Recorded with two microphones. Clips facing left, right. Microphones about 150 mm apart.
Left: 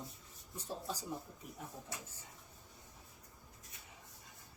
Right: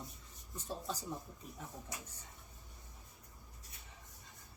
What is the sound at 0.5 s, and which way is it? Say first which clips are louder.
Speech: right 1 dB; 10° left (ahead or behind).